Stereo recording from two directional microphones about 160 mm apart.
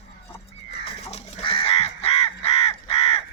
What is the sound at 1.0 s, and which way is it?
Crow, 40° left (ahead or behind).